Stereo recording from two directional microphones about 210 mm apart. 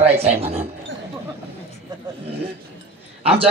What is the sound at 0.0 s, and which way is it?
Speech, 30° right (ahead or behind).